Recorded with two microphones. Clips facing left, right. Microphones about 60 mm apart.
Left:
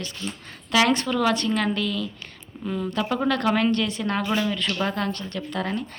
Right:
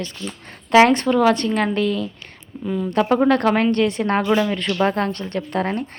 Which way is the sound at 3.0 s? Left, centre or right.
Right.